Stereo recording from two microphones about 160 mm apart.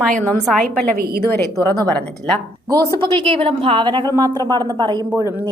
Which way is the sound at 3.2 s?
35° right (ahead or behind).